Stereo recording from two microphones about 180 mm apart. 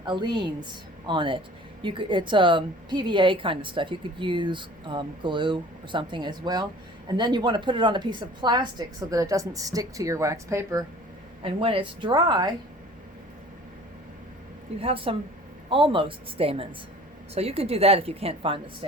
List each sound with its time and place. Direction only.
0.0 s a woman's voice: 25° right (ahead or behind)
11.4 s a woman's voice: 30° right (ahead or behind)
14.8 s a woman's voice: 30° right (ahead or behind)